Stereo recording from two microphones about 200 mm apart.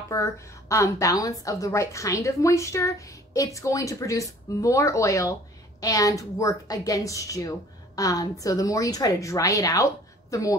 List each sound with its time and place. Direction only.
0.1 s a woman's voice: 15° left (ahead or behind)